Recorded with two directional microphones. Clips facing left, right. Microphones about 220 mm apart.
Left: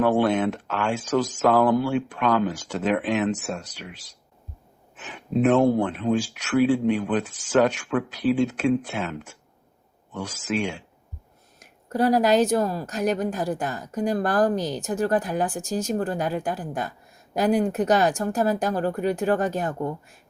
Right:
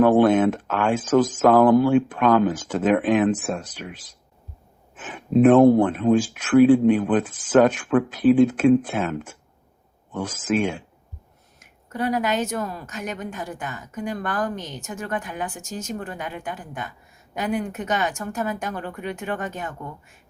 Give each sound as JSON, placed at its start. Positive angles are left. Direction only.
{"t": 0.0, "sound": "speech", "side_deg": -50}
{"t": 11.6, "sound": "speech", "side_deg": 35}